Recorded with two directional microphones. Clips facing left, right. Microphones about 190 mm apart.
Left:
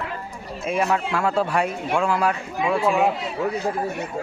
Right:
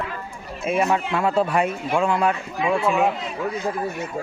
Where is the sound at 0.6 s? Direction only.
Centre (ahead or behind).